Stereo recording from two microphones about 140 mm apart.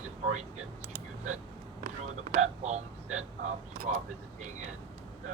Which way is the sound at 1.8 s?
70° right (ahead or behind).